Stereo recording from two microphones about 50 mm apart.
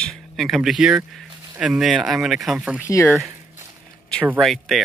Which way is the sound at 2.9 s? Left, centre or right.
Left.